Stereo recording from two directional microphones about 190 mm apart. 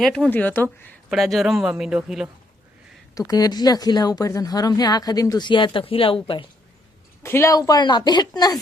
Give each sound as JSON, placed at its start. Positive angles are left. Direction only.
{"t": 0.0, "sound": "speech", "side_deg": 5}
{"t": 1.1, "sound": "a man's voice", "side_deg": 0}
{"t": 3.2, "sound": "speech", "side_deg": 20}
{"t": 7.2, "sound": "speech", "side_deg": 15}